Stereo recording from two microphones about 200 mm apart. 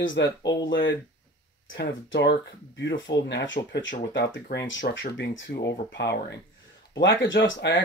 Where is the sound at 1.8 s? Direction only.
60° left (ahead or behind).